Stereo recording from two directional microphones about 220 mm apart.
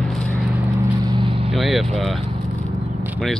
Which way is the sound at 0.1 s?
5° left (ahead or behind).